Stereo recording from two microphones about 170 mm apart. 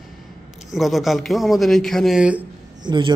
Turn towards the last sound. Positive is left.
turn(degrees=-25)  # may be behind; listen again after turning